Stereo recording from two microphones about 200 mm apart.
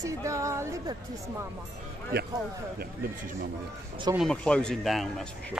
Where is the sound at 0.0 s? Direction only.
15° right (ahead or behind).